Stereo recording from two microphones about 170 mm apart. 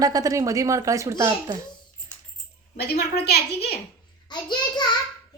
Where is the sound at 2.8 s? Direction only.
70° left (ahead or behind).